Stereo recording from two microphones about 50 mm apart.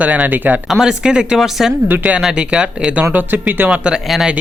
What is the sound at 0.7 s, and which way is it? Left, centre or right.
Speech, centre.